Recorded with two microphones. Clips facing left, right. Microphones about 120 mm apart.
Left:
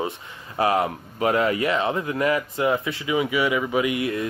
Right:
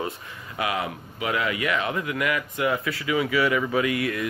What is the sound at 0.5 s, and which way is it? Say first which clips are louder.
Speech: left 6 dB; 40° left (ahead or behind).